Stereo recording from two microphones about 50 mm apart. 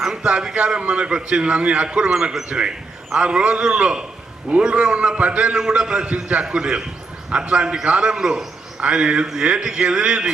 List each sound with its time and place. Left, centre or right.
0.0 s a man's voice: centre